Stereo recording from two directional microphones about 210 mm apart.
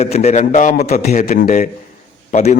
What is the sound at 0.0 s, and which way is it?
Speech, 30° left (ahead or behind).